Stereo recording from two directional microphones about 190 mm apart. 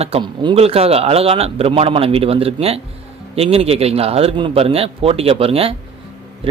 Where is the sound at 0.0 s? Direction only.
30° right (ahead or behind).